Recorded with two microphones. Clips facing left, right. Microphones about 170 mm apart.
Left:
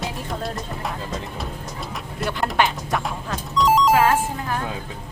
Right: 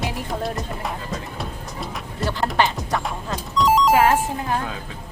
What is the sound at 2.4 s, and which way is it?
Music, centre (ahead or behind).